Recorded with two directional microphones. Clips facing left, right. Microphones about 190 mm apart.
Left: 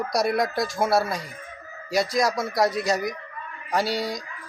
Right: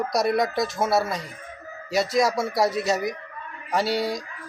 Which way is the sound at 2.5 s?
25° right (ahead or behind).